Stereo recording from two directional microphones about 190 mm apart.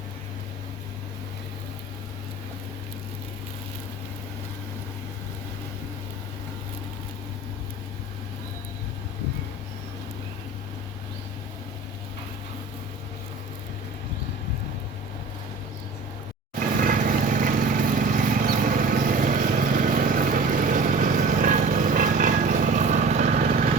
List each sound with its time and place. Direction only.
16.6 s vehicle: 45° right (ahead or behind)